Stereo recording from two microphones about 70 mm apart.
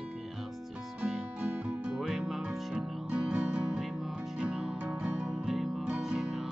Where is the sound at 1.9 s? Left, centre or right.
Centre.